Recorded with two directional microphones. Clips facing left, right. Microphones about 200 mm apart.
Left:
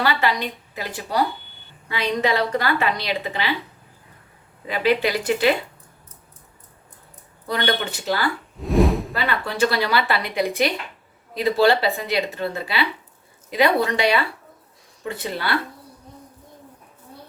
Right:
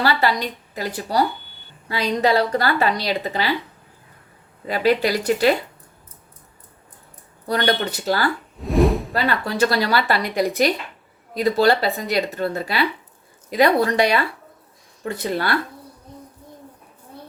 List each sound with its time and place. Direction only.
0.0 s a woman's voice: 40° right (ahead or behind)
4.7 s a woman's voice: 40° right (ahead or behind)
7.4 s a woman's voice: 40° right (ahead or behind)
8.6 s a sound: centre (ahead or behind)
9.1 s a woman's voice: 40° right (ahead or behind)